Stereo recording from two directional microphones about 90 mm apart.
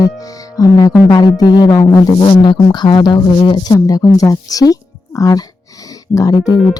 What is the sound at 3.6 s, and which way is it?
Speech, 40° left (ahead or behind).